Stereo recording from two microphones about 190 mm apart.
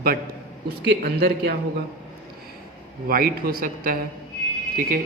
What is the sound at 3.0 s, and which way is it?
Speech, 50° right (ahead or behind).